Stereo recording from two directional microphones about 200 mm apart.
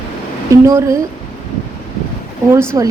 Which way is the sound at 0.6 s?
15° right (ahead or behind).